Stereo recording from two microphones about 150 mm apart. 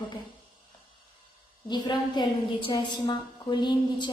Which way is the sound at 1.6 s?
30° left (ahead or behind).